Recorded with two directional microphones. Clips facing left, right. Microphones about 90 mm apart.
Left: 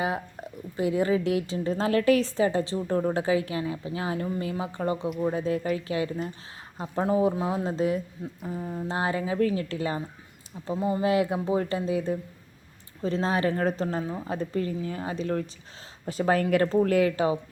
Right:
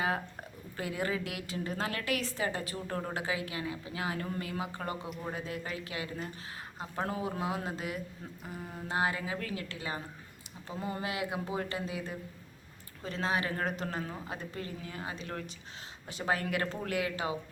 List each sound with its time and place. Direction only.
0.8 s a woman's voice: 25° left (ahead or behind)
5.0 s speech: 5° left (ahead or behind)
5.3 s a woman's voice: 35° left (ahead or behind)
10.8 s speech: 10° left (ahead or behind)
11.0 s speech: 35° left (ahead or behind)